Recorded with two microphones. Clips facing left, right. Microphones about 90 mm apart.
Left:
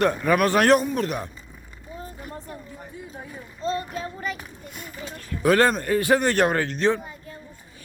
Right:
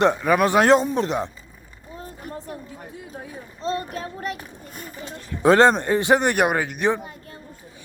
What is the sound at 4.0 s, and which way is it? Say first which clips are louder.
Child singing: right 1 dB; 60° right (ahead or behind).